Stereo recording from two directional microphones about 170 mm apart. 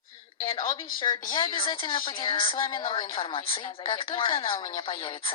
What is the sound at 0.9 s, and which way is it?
A woman's voice, 25° left (ahead or behind).